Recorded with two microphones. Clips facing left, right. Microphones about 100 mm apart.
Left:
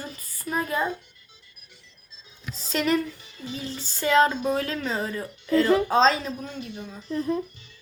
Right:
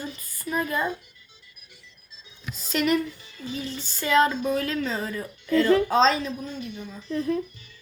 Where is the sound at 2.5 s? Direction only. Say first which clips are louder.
Right 1 dB; 35° left (ahead or behind).